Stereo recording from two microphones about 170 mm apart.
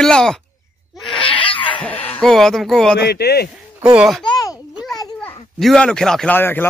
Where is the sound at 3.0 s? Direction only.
75° left (ahead or behind).